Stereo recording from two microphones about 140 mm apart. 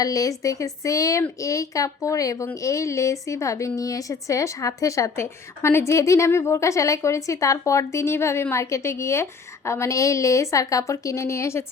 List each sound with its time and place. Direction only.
0.0 s a woman's voice: 25° left (ahead or behind)